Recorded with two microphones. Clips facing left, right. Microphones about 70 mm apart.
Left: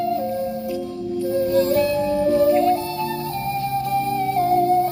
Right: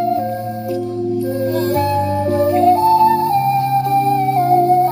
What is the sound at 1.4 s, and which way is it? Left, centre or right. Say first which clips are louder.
Music: left 2 dB; right.